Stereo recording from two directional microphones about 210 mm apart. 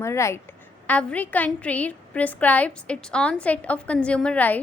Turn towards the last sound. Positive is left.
turn(degrees=5)  # may be behind; listen again after turning